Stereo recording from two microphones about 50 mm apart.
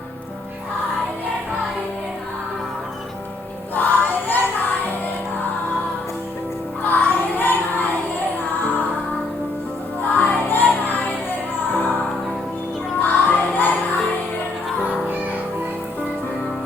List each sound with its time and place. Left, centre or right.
3.8 s music: left
6.8 s child singing: left
10.2 s music: left
13.0 s music: left